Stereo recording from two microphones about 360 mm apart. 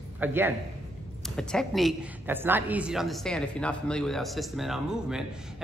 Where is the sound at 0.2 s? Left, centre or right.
Centre.